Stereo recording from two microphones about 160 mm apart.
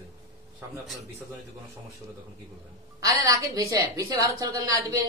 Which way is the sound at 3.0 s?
20° right (ahead or behind).